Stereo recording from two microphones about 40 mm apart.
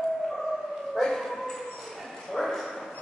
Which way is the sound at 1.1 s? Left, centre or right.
Centre.